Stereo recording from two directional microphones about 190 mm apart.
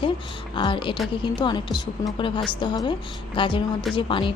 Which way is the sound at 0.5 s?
25° left (ahead or behind).